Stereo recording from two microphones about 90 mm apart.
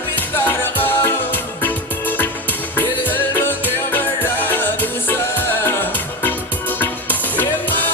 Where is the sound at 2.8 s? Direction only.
25° left (ahead or behind).